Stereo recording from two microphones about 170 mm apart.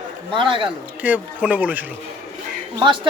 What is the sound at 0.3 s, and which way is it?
Speech, 30° right (ahead or behind).